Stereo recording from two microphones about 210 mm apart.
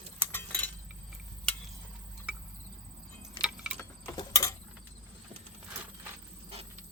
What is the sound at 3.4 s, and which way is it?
Keys jangling, 5° right (ahead or behind).